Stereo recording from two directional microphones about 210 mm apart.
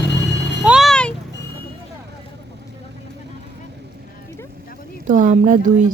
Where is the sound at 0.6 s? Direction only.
5° right (ahead or behind).